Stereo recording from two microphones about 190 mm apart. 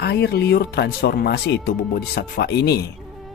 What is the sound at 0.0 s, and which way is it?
Speech, 60° left (ahead or behind).